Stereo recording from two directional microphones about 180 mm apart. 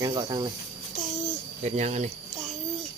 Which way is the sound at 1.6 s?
40° right (ahead or behind).